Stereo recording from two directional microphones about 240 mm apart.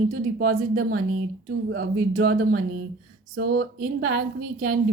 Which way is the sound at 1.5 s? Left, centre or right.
Right.